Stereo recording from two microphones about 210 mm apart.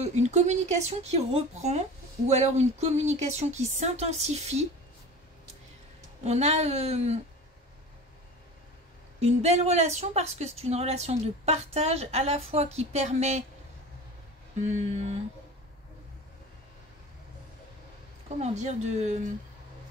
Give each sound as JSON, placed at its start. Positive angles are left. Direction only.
{"t": 0.0, "sound": "speech", "side_deg": -30}
{"t": 6.2, "sound": "speech", "side_deg": -30}
{"t": 9.2, "sound": "speech", "side_deg": -30}
{"t": 14.9, "sound": "speech", "side_deg": -30}
{"t": 18.4, "sound": "speech", "side_deg": -30}